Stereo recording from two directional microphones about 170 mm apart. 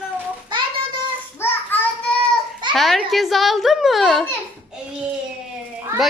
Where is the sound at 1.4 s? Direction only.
15° left (ahead or behind).